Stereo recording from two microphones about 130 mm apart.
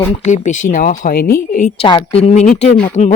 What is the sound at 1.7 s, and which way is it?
Speech, 35° left (ahead or behind).